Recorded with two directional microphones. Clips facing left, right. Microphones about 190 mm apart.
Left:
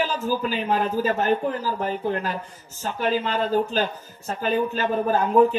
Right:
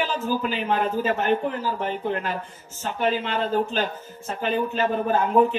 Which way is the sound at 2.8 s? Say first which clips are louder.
Even; 35° left (ahead or behind).